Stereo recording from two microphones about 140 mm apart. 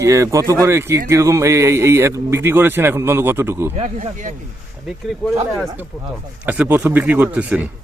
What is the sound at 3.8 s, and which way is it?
Speech, 60° right (ahead or behind).